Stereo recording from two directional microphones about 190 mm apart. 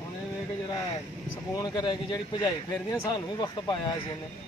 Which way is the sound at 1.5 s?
20° left (ahead or behind).